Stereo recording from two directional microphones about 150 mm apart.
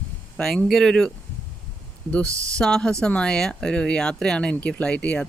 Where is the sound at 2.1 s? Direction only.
10° left (ahead or behind).